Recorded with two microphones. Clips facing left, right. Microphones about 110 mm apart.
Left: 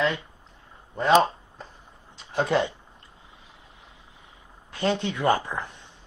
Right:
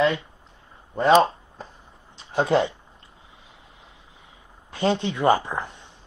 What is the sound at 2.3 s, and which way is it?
Speech, 25° right (ahead or behind).